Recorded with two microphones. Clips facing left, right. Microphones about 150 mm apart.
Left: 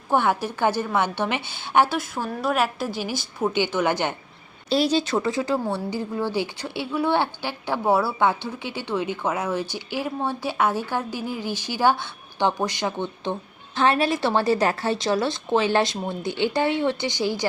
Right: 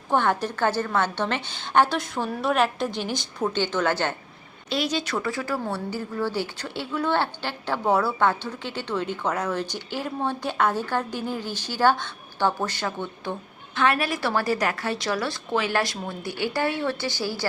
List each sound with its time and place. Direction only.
0.1 s a woman's voice: 10° left (ahead or behind)
4.7 s a woman's voice: 30° left (ahead or behind)
13.7 s a woman's voice: 30° left (ahead or behind)